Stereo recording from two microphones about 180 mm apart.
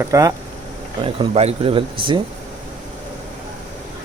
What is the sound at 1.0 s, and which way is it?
Speech, 30° right (ahead or behind).